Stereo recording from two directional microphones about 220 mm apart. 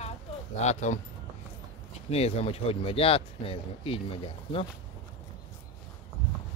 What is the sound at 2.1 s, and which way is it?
Speech, 30° left (ahead or behind).